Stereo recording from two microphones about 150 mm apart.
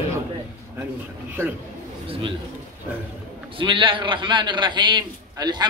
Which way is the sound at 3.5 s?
35° right (ahead or behind).